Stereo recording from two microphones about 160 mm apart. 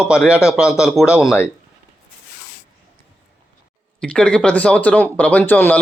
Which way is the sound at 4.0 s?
5° left (ahead or behind).